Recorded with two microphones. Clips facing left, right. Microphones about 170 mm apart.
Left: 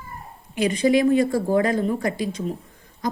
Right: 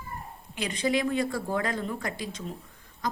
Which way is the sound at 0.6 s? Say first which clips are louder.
Left 9 dB; 10° left (ahead or behind).